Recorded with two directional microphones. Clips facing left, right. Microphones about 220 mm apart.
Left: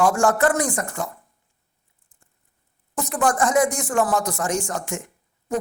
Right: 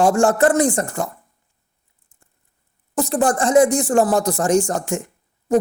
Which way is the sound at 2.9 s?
30° right (ahead or behind).